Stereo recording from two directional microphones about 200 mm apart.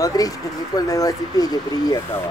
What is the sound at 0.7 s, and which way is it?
Speech, 20° left (ahead or behind).